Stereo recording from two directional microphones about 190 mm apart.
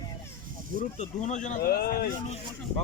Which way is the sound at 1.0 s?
40° left (ahead or behind).